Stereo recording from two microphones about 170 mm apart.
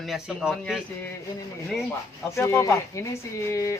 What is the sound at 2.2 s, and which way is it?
Speech, 15° left (ahead or behind).